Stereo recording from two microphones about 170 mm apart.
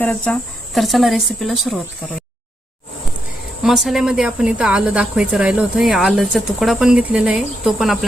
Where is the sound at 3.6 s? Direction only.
Centre (ahead or behind).